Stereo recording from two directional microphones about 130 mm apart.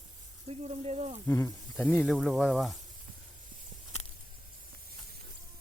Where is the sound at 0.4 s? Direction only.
55° right (ahead or behind).